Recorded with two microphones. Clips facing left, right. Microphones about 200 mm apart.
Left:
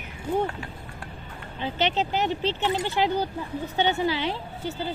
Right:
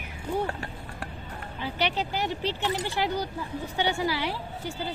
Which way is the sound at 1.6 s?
20° left (ahead or behind).